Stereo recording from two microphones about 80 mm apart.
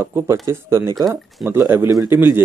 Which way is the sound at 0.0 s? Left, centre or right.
Right.